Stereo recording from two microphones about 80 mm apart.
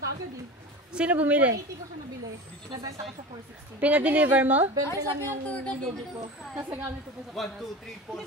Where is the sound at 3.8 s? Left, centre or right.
Centre.